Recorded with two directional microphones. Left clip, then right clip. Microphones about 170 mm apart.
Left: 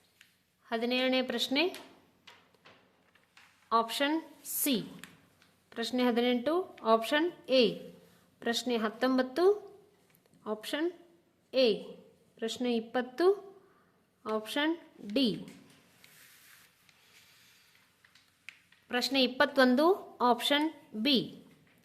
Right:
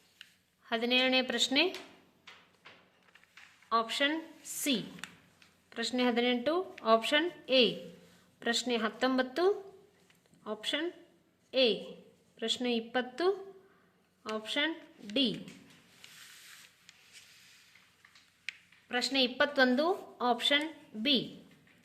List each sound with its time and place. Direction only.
0.6 s speech: 10° left (ahead or behind)
3.7 s a woman's voice: 20° left (ahead or behind)
14.3 s a woman's voice: 25° left (ahead or behind)
18.9 s a woman's voice: 25° left (ahead or behind)